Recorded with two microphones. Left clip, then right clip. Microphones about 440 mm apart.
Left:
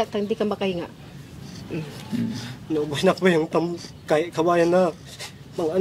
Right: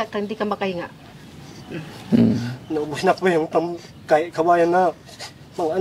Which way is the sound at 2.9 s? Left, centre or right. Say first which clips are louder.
Right 1 dB; left.